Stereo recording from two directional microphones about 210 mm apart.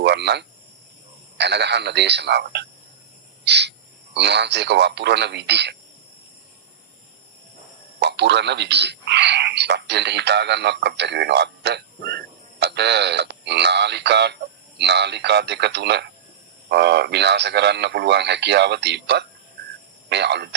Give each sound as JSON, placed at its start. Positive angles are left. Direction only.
{"t": 0.0, "sound": "speech", "side_deg": -55}
{"t": 7.9, "sound": "speech", "side_deg": -55}